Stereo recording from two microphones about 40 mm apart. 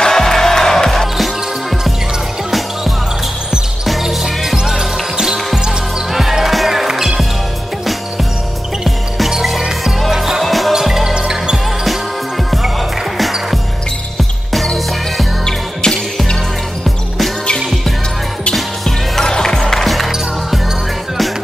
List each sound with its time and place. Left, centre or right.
0.0 s music: centre
0.9 s music: centre
4.0 s music: centre
8.8 s basketball bounce: centre
10.1 s music: centre
10.4 s music: centre
11.1 s basketball bounce: centre
11.5 s music: centre
13.2 s music: centre
15.4 s music: centre
17.6 s music: centre
18.5 s music: centre